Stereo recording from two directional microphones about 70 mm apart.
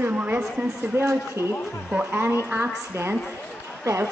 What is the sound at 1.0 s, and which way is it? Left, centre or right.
A woman's voice, right.